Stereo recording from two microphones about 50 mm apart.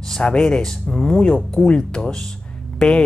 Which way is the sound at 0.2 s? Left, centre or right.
Centre.